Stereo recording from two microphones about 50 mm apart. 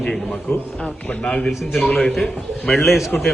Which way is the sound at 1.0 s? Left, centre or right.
Left.